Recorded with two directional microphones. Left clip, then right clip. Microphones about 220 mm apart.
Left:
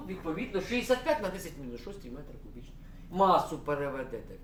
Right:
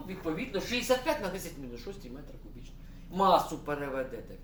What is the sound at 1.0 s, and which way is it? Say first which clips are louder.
Speech: left 2 dB; 10° left (ahead or behind).